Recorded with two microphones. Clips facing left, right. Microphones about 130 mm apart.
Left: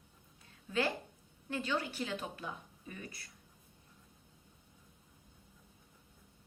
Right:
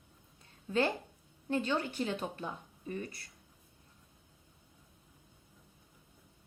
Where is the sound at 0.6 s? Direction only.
30° right (ahead or behind).